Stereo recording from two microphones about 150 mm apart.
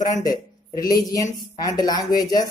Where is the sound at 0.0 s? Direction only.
25° left (ahead or behind).